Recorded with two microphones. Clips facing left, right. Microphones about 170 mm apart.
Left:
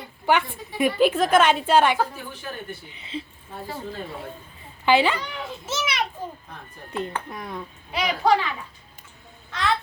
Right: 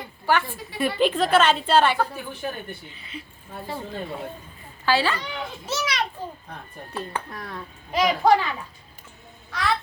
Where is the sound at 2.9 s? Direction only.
25° left (ahead or behind).